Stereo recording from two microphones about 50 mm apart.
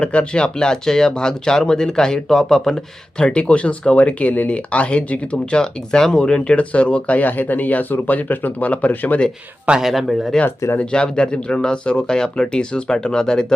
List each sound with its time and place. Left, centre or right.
0.0 s speech: left; by 3.2 s centre
3.2 s speech: left
9.8 s speech: centre
10.8 s speech: centre